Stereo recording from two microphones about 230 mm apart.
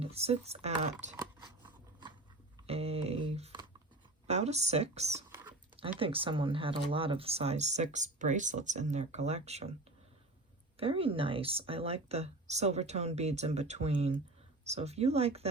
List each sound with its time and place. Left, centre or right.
0.0 s speech: right
1.1 s scissors: centre
2.6 s a sound: right
4.3 s speech: right
5.3 s a sound: centre
6.0 s speech: right
10.8 s speech: right